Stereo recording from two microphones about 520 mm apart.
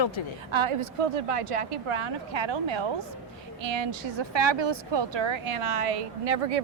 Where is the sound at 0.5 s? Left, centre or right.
Right.